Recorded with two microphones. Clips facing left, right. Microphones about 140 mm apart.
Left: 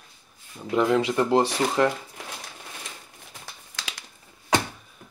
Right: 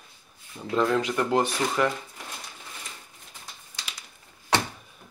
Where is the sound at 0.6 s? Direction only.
15° left (ahead or behind).